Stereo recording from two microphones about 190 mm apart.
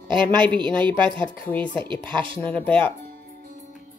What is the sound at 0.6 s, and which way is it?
Speech, 25° right (ahead or behind).